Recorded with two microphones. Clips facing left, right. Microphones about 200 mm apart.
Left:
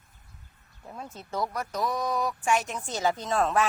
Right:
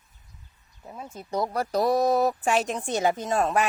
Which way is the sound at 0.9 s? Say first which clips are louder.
Right 1 dB; 5° right (ahead or behind).